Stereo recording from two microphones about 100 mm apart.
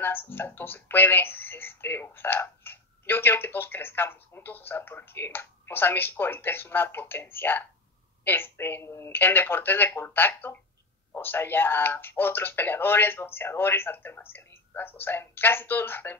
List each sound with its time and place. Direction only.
0.0 s speech: 20° left (ahead or behind)